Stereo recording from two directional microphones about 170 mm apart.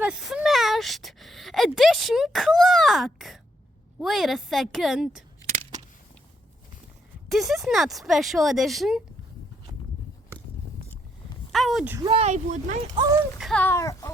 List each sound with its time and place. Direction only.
0.0 s a sound: 5° right (ahead or behind)
4.0 s speech: centre (ahead or behind)
7.3 s speech: centre (ahead or behind)
11.5 s speech: centre (ahead or behind)
12.0 s speech: 35° right (ahead or behind)
13.0 s a sound: 20° right (ahead or behind)
13.4 s speech: 5° left (ahead or behind)